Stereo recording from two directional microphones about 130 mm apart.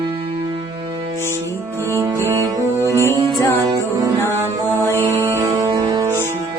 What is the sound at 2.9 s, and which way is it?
Music, 20° left (ahead or behind).